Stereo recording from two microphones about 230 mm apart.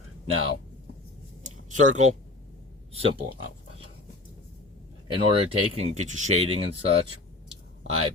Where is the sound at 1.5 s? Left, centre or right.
Right.